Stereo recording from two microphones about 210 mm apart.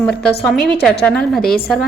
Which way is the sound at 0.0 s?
5° left (ahead or behind).